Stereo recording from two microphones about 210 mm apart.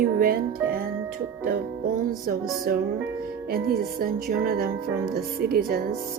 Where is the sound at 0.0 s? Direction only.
45° right (ahead or behind).